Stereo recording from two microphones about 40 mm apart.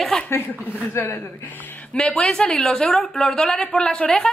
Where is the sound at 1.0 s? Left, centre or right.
Left.